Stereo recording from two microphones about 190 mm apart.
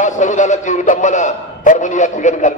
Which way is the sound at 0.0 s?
40° left (ahead or behind).